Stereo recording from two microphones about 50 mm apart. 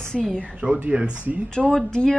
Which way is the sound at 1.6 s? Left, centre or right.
Centre.